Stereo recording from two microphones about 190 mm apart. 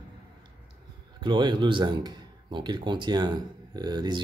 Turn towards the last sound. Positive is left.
turn(degrees=-20)  # may be behind; listen again after turning